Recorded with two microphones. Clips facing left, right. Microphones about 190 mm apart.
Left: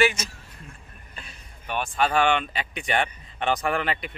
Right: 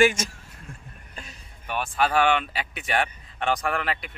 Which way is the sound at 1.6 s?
5° right (ahead or behind).